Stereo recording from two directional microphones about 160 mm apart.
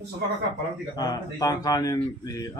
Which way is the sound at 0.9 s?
25° left (ahead or behind).